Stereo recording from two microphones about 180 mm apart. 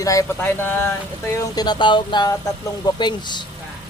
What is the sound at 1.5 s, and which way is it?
Speech, 25° left (ahead or behind).